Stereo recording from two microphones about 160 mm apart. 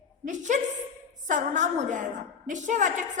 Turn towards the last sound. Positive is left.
turn(degrees=-50)  # may be behind; listen again after turning